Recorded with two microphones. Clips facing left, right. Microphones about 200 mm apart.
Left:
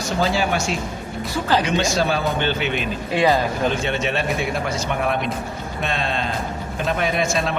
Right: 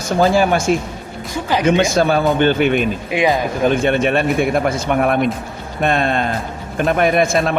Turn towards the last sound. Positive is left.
turn(degrees=-55)  # may be behind; listen again after turning